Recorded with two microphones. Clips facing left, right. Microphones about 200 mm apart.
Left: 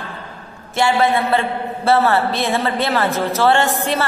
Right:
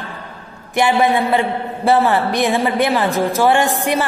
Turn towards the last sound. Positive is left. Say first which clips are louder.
# right 2 dB
turn(degrees=-15)  # may be behind; listen again after turning